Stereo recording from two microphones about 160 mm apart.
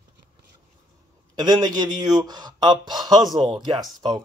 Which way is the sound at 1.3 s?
25° right (ahead or behind).